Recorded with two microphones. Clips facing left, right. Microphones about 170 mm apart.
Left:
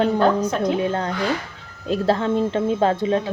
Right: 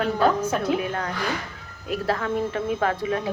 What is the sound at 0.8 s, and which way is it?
A woman's voice, 30° left (ahead or behind).